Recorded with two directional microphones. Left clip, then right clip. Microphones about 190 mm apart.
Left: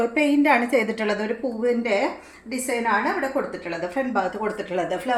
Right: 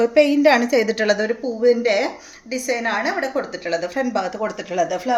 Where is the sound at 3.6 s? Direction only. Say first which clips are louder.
Right 4 dB; 60° right (ahead or behind).